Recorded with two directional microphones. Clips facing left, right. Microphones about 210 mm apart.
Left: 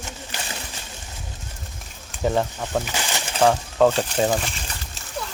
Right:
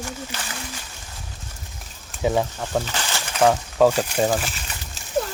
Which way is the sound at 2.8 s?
15° left (ahead or behind).